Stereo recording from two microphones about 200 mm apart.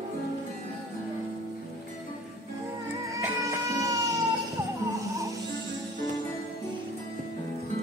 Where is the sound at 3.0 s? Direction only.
15° right (ahead or behind).